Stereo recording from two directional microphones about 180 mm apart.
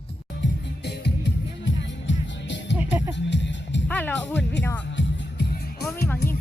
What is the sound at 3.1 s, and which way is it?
Music, 85° left.